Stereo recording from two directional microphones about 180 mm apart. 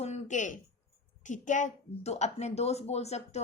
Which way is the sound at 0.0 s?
40° left (ahead or behind).